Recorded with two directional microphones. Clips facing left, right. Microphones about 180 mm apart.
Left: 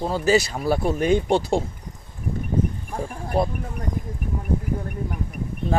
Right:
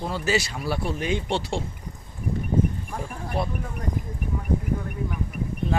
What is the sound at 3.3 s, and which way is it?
Speech, 40° left (ahead or behind).